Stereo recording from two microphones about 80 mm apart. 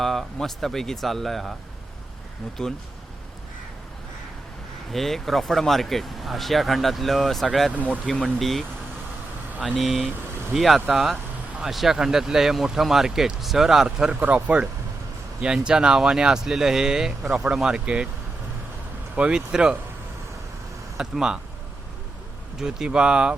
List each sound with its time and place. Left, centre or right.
0.0 s speech: centre
2.6 s speech: centre
4.9 s speech: centre
9.6 s speech: centre
14.2 s speech: centre
19.1 s speech: centre
21.0 s speech: centre
22.5 s speech: centre